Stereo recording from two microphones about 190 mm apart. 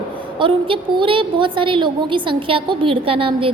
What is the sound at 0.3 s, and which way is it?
A woman's voice, 25° right (ahead or behind).